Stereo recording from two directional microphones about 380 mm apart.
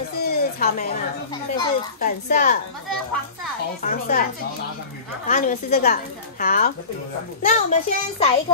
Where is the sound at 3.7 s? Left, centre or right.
Left.